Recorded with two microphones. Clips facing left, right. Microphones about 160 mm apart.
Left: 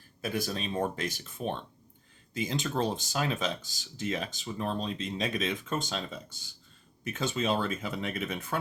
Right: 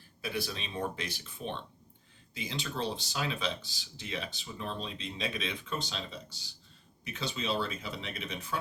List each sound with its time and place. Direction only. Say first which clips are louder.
0.2 s speech: left 4 dB; 45° left (ahead or behind)